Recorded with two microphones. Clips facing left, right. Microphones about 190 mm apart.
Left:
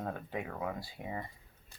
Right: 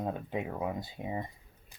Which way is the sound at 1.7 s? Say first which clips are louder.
Left 1 dB; 15° right (ahead or behind).